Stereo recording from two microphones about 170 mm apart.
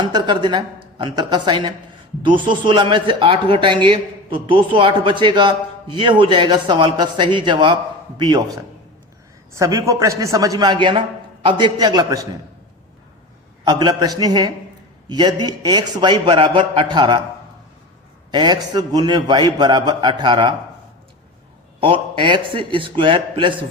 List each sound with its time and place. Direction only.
0.0 s a man's voice: 25° right (ahead or behind)
13.7 s a man's voice: 25° right (ahead or behind)
18.3 s a man's voice: 25° right (ahead or behind)
21.8 s a man's voice: 30° right (ahead or behind)